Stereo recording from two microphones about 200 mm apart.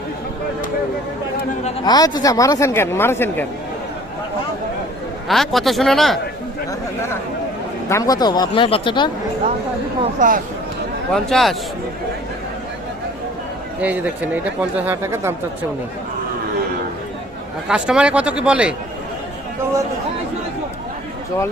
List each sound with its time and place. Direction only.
1.8 s speech: 20° left (ahead or behind)
5.3 s speech: centre (ahead or behind)
7.9 s speech: 15° left (ahead or behind)
10.0 s speech: 40° right (ahead or behind)
11.1 s speech: centre (ahead or behind)
13.8 s speech: 10° right (ahead or behind)
17.7 s speech: 5° right (ahead or behind)